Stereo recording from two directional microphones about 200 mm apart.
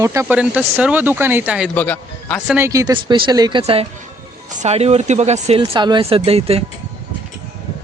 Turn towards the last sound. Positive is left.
turn(degrees=-30)  # may be behind; listen again after turning